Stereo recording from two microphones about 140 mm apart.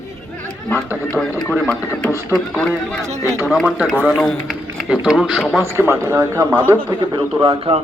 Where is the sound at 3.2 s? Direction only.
20° right (ahead or behind).